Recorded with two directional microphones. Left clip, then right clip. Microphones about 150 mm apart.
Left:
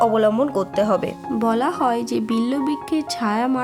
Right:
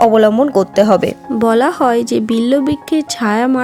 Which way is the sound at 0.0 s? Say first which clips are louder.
Right 7 dB; 35° right (ahead or behind).